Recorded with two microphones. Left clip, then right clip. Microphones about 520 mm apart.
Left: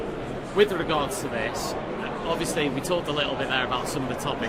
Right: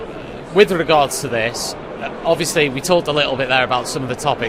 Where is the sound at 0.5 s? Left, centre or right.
Right.